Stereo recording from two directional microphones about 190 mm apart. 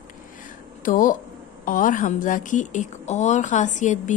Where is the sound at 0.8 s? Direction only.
45° left (ahead or behind).